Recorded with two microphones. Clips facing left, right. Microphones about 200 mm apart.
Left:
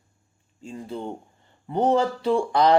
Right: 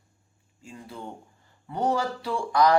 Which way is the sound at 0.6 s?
30° left (ahead or behind).